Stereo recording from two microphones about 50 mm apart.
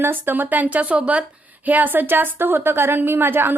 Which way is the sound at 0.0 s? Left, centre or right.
Right.